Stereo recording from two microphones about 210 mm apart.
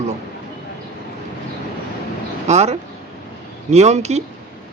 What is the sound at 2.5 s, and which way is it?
A man's voice, 30° right (ahead or behind).